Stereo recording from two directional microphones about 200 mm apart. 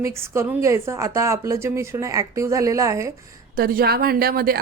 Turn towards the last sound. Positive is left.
turn(degrees=-50)  # may be behind; listen again after turning